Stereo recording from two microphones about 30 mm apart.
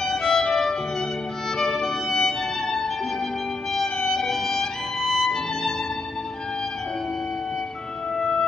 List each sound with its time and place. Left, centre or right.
0.0 s violin: centre
1.6 s music: centre
4.1 s music: centre